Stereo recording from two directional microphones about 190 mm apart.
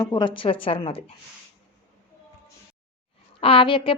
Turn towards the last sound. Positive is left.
turn(degrees=25)  # may be behind; listen again after turning